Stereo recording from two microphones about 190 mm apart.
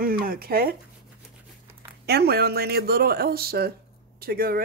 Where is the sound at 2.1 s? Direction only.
55° right (ahead or behind).